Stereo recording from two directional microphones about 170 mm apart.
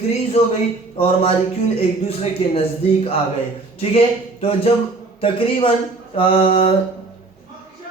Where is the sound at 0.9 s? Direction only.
35° left (ahead or behind).